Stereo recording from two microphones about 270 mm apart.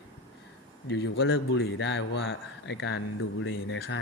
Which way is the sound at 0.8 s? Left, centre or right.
Left.